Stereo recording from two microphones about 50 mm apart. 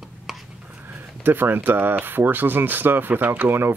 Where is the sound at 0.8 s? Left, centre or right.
Right.